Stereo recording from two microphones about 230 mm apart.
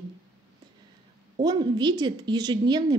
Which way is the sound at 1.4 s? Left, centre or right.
Centre.